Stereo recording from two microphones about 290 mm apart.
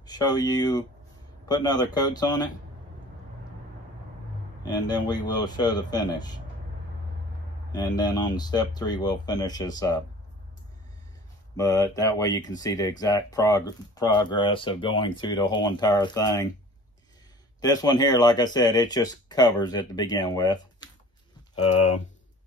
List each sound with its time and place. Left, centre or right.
0.0 s speech: centre
4.6 s speech: centre
7.7 s speech: centre
11.5 s speech: centre
17.6 s speech: centre